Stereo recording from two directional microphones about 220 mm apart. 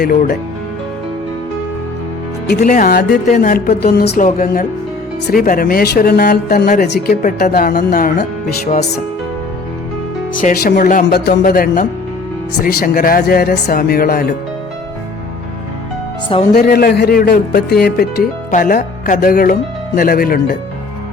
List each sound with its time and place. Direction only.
0.0 s speech: 40° left (ahead or behind)
2.6 s speech: 40° left (ahead or behind)
10.3 s speech: 40° left (ahead or behind)
16.6 s speech: 45° left (ahead or behind)